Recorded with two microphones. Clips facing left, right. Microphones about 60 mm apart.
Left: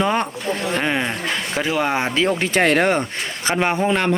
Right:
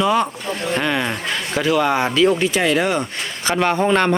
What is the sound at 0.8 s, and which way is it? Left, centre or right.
Speech, left.